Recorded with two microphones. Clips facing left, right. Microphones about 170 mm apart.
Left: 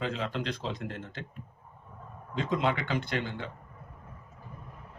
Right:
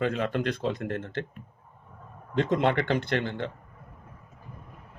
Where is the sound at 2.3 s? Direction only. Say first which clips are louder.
Right 5 dB; 55° right (ahead or behind).